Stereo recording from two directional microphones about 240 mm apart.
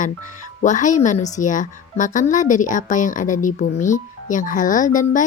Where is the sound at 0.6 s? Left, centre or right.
Left.